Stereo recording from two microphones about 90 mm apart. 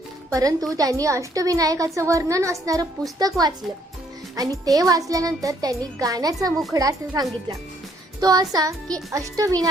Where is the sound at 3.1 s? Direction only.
50° right (ahead or behind).